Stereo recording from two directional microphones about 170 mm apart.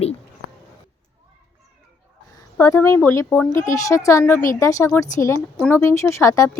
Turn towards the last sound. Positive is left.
turn(degrees=15)  # may be behind; listen again after turning